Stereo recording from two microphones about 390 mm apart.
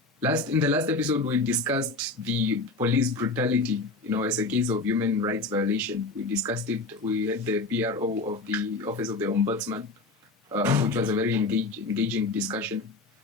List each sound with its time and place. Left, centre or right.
0.2 s speech: centre